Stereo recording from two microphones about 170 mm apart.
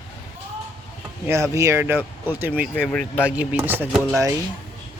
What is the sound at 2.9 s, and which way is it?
Speech, 5° left (ahead or behind).